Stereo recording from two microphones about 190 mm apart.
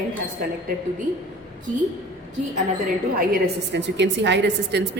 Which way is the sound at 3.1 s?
60° right (ahead or behind).